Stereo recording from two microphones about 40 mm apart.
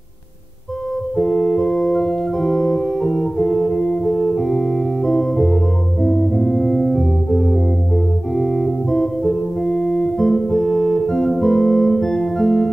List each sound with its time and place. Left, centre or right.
1.1 s organ: centre
8.9 s music: centre